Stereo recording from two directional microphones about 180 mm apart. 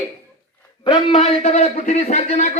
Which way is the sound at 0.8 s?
30° left (ahead or behind).